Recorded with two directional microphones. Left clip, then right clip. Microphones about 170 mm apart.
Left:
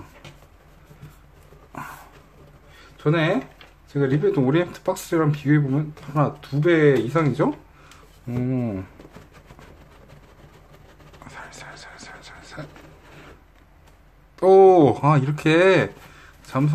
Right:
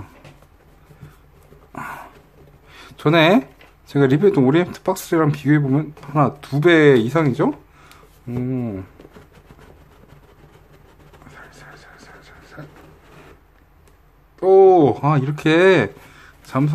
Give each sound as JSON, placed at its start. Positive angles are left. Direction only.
{"t": 2.7, "sound": "a sound", "side_deg": -40}
{"t": 3.9, "sound": "speech", "side_deg": -35}
{"t": 6.5, "sound": "speech", "side_deg": -35}
{"t": 7.2, "sound": "speech", "side_deg": -10}
{"t": 8.3, "sound": "speech", "side_deg": 0}
{"t": 11.2, "sound": "a sound", "side_deg": 10}
{"t": 14.4, "sound": "speech", "side_deg": 5}